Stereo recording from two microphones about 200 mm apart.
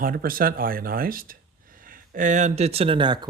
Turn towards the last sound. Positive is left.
turn(degrees=-25)  # may be behind; listen again after turning